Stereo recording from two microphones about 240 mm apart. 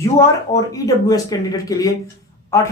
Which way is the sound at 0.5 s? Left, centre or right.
Centre.